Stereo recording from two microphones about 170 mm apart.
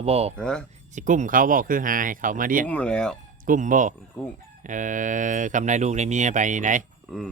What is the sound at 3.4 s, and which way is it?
Speech, 50° right (ahead or behind).